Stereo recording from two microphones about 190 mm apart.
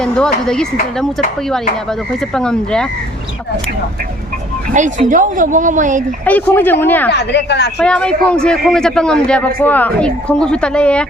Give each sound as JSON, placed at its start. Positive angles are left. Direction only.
{"t": 0.0, "sound": "a man's voice", "side_deg": 5}
{"t": 4.7, "sound": "speech", "side_deg": -40}
{"t": 6.2, "sound": "speech", "side_deg": 10}
{"t": 7.1, "sound": "a woman's voice", "side_deg": 65}
{"t": 7.8, "sound": "a man's voice", "side_deg": 5}